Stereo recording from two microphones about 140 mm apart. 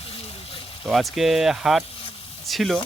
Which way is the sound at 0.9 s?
Centre (ahead or behind).